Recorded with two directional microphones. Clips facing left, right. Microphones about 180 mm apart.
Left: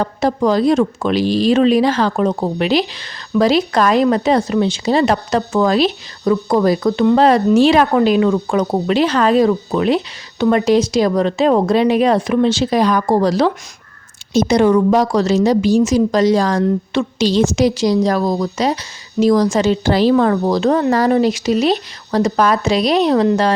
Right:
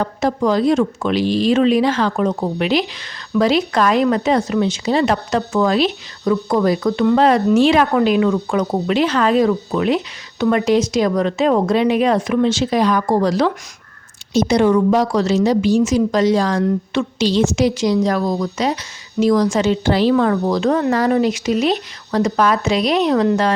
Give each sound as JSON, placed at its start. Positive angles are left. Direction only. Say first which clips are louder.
{"t": 0.0, "sound": "a woman's voice", "louder": "left 2 dB", "side_deg": 35}
{"t": 14.3, "sound": "a woman's voice", "louder": "left 2 dB", "side_deg": 45}